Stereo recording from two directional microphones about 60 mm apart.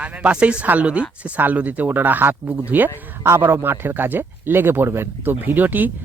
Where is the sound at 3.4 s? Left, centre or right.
Right.